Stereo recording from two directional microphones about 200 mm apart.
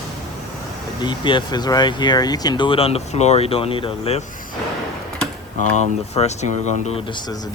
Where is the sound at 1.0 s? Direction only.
25° left (ahead or behind).